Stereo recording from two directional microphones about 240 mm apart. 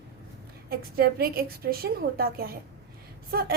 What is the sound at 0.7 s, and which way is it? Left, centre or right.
A woman's voice, right.